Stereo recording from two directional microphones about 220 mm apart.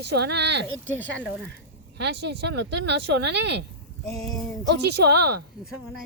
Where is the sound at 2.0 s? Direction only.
50° right (ahead or behind).